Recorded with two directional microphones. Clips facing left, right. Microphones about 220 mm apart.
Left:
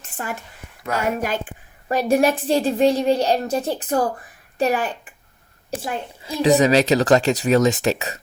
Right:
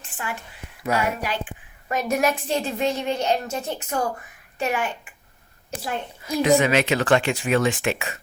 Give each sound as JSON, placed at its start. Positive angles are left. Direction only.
{"t": 1.0, "sound": "a woman's voice", "side_deg": 45}
{"t": 5.8, "sound": "a woman's voice", "side_deg": 25}